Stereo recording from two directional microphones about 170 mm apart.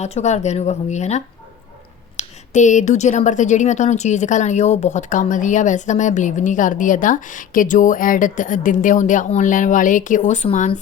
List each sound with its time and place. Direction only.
0.0 s a woman's voice: 40° left (ahead or behind)